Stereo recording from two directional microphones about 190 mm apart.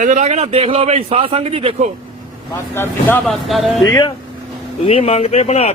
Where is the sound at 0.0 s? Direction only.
40° right (ahead or behind).